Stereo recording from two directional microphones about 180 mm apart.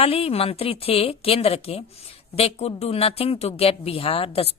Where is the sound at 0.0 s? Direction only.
35° left (ahead or behind).